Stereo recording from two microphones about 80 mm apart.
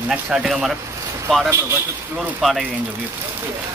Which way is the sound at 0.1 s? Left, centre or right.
Centre.